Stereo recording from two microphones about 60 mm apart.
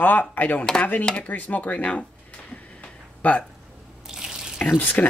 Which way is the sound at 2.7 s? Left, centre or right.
Left.